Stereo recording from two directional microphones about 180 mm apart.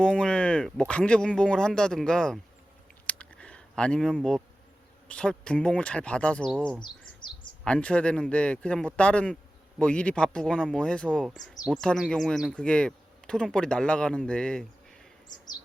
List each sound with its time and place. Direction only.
0.0 s speech: 5° left (ahead or behind)
3.1 s a sound: 5° left (ahead or behind)
5.0 s a man's voice: 5° left (ahead or behind)
6.8 s bird: 25° left (ahead or behind)
7.6 s a man's voice: 5° left (ahead or behind)